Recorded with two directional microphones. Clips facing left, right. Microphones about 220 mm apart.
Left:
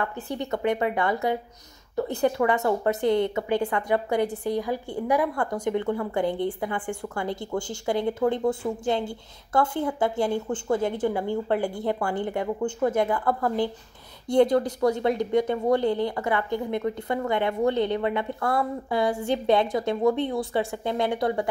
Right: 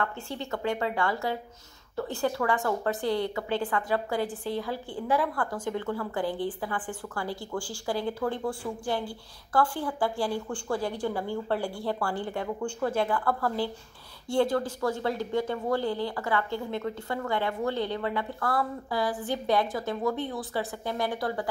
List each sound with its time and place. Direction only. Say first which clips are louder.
0.0 s a woman's voice: left 3 dB; 15° left (ahead or behind)